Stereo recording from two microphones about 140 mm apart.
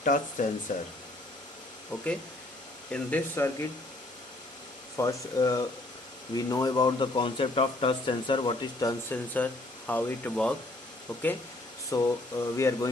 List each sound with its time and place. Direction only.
0.0 s speech: 70° left (ahead or behind)
1.9 s speech: 10° left (ahead or behind)
4.9 s speech: 25° left (ahead or behind)
9.1 s speech: 10° left (ahead or behind)
11.9 s speech: 25° left (ahead or behind)